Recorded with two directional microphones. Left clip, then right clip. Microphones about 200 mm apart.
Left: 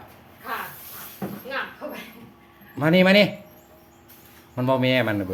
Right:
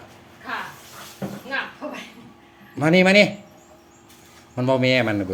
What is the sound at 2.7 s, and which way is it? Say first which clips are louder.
Speech: right 2 dB; 5° right (ahead or behind).